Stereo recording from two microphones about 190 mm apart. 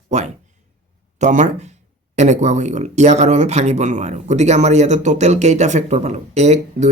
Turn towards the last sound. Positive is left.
turn(degrees=-35)  # may be behind; listen again after turning